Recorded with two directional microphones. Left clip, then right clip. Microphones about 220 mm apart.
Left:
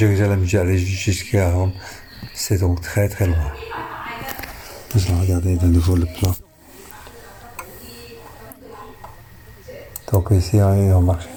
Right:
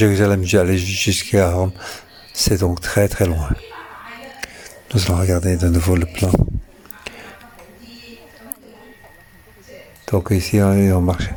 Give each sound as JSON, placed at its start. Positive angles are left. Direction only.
{"t": 0.0, "sound": "speech", "side_deg": -50}
{"t": 4.4, "sound": "a sound", "side_deg": -50}
{"t": 4.9, "sound": "speech", "side_deg": -50}
{"t": 10.1, "sound": "speech", "side_deg": -35}